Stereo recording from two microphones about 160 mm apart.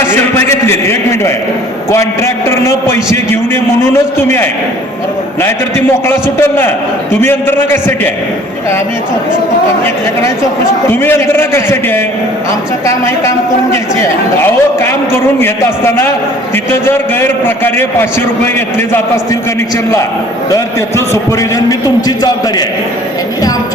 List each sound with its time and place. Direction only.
0.0 s a sound: 15° left (ahead or behind)
1.9 s a man's voice: 15° left (ahead or behind)
10.8 s a man's voice: 15° left (ahead or behind)
20.5 s a man's voice: 20° left (ahead or behind)